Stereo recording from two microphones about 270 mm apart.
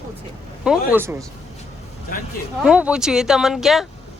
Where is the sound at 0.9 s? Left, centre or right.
Centre.